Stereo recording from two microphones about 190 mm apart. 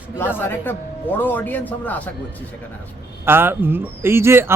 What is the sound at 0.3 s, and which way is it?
Speech, 10° left (ahead or behind).